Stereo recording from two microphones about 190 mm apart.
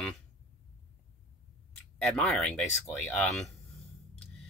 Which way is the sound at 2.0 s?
5° left (ahead or behind).